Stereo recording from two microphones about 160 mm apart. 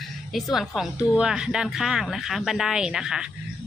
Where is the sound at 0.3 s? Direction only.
Centre (ahead or behind).